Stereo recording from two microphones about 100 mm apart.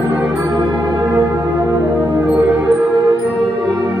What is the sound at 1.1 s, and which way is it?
Church bell, 30° right (ahead or behind).